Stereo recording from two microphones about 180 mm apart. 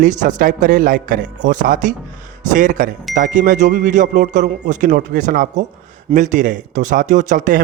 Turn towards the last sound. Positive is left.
turn(degrees=-45)  # may be behind; listen again after turning